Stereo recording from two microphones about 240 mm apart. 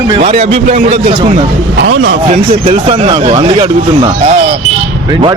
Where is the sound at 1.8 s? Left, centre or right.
Right.